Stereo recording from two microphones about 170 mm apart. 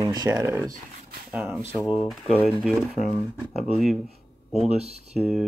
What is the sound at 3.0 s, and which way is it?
Speech, 40° left (ahead or behind).